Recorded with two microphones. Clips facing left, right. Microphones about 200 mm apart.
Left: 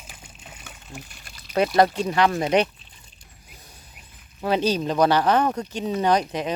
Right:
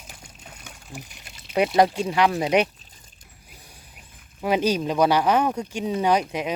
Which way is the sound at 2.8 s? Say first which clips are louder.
Even; 45° right (ahead or behind).